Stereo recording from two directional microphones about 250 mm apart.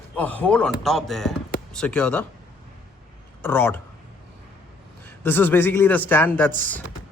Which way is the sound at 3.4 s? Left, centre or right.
Centre.